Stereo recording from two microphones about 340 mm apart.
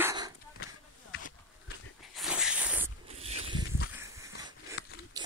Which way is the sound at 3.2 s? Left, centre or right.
Centre.